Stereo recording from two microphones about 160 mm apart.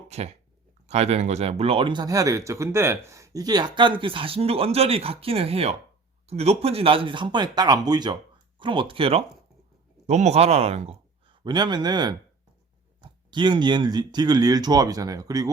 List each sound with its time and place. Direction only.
0.1 s speech: 45° right (ahead or behind); by 15.4 s 20° right (ahead or behind)